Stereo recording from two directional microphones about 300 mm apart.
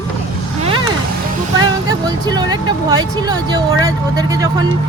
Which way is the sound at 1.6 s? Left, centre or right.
Centre.